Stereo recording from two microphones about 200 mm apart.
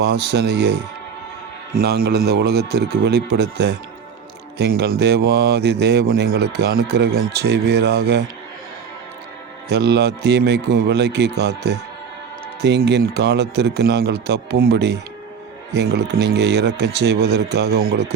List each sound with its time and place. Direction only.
0.0 s a man's voice: 55° right (ahead or behind)
9.6 s speech: 55° right (ahead or behind)